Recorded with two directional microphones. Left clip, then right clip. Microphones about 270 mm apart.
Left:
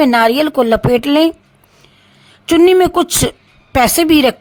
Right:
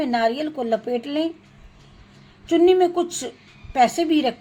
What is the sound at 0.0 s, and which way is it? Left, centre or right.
A woman's voice, left.